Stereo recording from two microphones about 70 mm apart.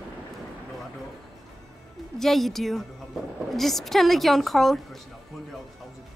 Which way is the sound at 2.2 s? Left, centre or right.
Centre.